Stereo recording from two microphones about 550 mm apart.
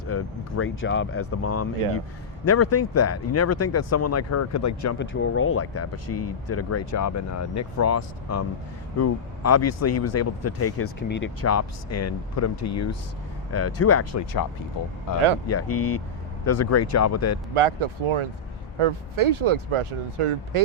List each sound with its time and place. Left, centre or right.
0.1 s speech: left
15.4 s speech: left
17.5 s speech: right